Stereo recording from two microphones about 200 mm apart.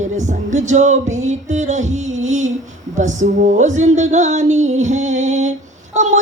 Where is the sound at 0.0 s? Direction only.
35° right (ahead or behind).